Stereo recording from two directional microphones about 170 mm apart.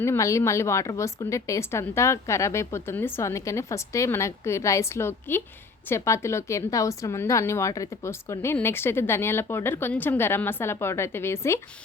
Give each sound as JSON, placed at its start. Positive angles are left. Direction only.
{"t": 0.0, "sound": "a woman's voice", "side_deg": 15}